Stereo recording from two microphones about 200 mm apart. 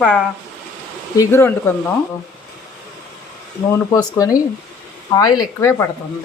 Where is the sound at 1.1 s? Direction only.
10° left (ahead or behind).